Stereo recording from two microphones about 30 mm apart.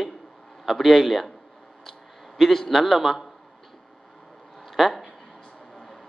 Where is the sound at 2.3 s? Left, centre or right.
Centre.